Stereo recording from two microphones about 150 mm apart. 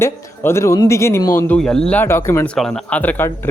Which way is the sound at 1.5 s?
5° left (ahead or behind).